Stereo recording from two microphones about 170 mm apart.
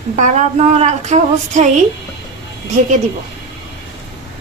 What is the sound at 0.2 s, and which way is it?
A woman's voice, 40° right (ahead or behind).